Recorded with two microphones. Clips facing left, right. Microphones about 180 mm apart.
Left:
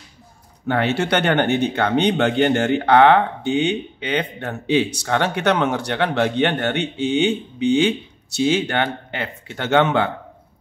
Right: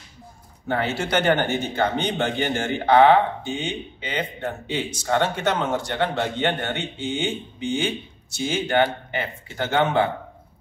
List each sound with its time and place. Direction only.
0.7 s speech: 70° left (ahead or behind)